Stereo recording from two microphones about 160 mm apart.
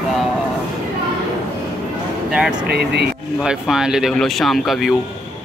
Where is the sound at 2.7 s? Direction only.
85° right.